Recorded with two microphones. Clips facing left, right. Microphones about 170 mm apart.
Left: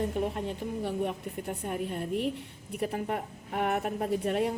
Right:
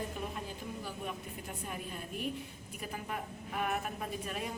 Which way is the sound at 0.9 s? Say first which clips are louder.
Left 9 dB; 65° left (ahead or behind).